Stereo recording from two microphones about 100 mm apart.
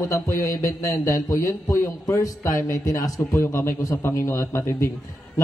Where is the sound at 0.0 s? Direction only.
30° left (ahead or behind).